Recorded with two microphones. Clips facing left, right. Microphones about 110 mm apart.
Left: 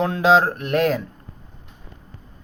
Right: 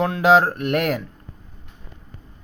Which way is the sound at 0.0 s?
25° left (ahead or behind).